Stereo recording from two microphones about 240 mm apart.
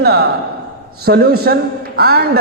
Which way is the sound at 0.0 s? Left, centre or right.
Right.